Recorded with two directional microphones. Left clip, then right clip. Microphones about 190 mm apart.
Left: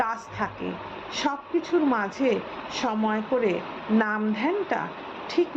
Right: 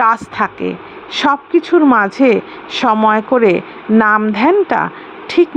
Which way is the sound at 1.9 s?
35° right (ahead or behind).